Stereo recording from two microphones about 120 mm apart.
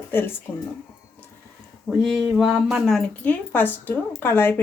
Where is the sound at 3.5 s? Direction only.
15° left (ahead or behind).